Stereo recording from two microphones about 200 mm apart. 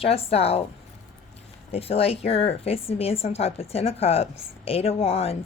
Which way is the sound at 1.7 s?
30° left (ahead or behind).